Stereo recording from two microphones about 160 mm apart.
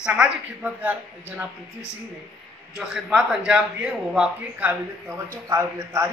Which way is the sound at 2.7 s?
5° right (ahead or behind).